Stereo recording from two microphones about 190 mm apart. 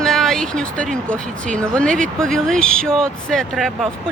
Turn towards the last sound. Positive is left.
turn(degrees=0)  # may be behind; listen again after turning